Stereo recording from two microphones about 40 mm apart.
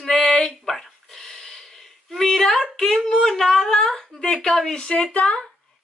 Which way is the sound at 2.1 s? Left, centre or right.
Centre.